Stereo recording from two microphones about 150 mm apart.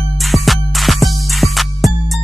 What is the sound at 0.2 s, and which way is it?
Music, centre (ahead or behind).